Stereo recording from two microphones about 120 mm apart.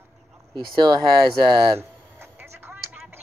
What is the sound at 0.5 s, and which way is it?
Speech, 35° right (ahead or behind).